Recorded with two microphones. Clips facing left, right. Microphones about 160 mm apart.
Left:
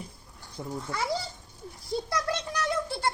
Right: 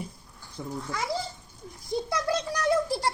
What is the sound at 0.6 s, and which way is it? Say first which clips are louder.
Speech: even; 25° left (ahead or behind).